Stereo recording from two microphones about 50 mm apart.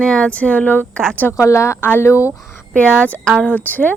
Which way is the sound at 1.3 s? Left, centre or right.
Left.